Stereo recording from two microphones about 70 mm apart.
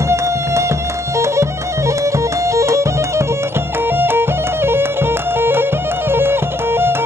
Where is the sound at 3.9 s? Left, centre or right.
Right.